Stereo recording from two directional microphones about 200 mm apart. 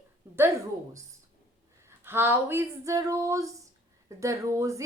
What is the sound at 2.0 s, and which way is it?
Speech, 10° right (ahead or behind).